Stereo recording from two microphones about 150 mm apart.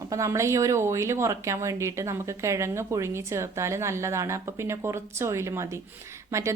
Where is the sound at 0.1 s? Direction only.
20° right (ahead or behind).